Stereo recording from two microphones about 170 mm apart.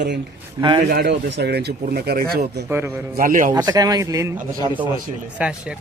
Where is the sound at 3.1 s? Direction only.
55° right (ahead or behind).